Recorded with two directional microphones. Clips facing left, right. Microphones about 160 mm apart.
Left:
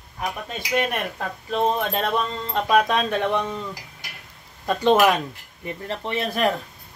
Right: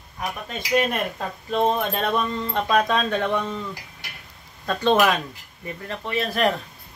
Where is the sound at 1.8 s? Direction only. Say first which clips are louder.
Even; centre (ahead or behind).